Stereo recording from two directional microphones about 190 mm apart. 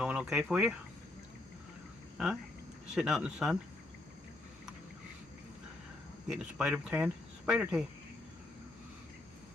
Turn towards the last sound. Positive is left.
turn(degrees=-5)  # may be behind; listen again after turning